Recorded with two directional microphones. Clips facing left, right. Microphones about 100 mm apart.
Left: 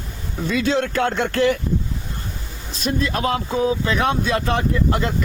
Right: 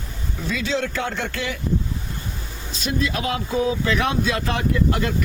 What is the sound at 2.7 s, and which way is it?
Speech, 45° left (ahead or behind).